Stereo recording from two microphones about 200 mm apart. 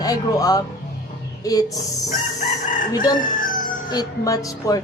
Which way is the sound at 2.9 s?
20° left (ahead or behind).